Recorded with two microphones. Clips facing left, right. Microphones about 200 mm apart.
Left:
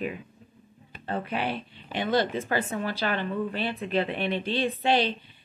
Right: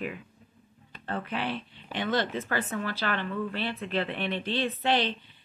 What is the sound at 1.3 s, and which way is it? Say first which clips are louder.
Speech: left 2 dB; 15° left (ahead or behind).